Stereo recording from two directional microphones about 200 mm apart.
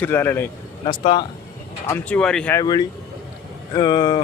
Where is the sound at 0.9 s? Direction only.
25° left (ahead or behind).